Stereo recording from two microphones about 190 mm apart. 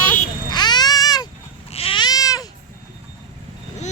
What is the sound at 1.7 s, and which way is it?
Goat, 30° left (ahead or behind).